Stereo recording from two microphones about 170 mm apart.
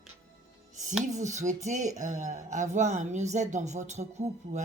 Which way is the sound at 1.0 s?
45° right (ahead or behind).